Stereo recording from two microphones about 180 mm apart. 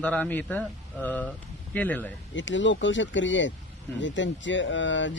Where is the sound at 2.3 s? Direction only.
90° left.